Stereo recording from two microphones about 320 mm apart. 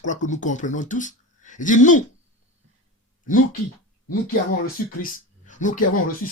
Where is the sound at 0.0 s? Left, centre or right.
Left.